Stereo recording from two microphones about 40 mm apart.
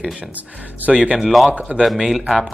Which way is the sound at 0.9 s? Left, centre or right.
Right.